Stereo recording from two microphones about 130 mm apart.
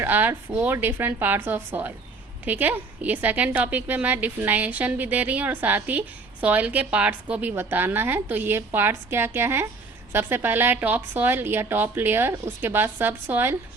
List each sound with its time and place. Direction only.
0.0 s a woman's voice: 15° right (ahead or behind)